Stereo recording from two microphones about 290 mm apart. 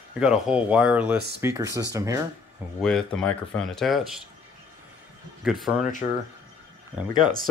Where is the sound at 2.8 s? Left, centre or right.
Centre.